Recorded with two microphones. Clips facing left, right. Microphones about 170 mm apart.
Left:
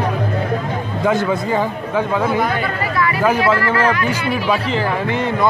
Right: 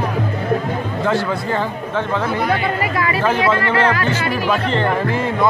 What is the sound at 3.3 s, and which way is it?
Speech, 25° right (ahead or behind).